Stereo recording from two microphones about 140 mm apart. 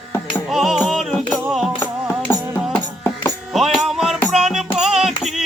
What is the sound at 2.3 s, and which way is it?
Music, 15° left (ahead or behind).